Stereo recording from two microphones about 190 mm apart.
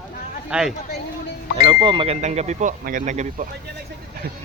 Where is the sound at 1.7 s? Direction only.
25° right (ahead or behind).